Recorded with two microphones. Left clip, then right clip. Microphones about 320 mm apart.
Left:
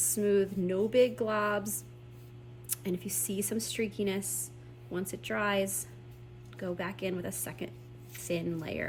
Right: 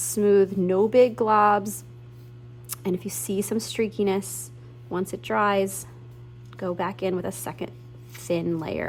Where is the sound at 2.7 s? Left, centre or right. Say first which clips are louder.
Right 7 dB; centre.